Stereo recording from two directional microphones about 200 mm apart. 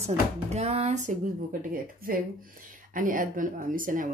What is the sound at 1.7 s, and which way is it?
A woman's voice, 45° right (ahead or behind).